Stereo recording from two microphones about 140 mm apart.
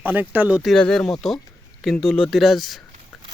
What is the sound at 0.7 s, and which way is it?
Speech, 5° left (ahead or behind).